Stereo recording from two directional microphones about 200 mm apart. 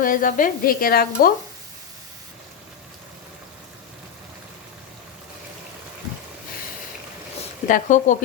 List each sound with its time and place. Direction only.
0.0 s speech: 45° left (ahead or behind)
7.7 s speech: 40° left (ahead or behind)